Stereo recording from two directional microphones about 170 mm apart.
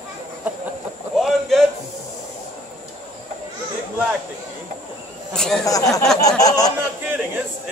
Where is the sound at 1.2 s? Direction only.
Centre (ahead or behind).